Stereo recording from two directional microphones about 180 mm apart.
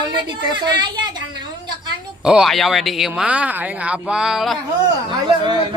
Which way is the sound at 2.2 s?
5° right (ahead or behind).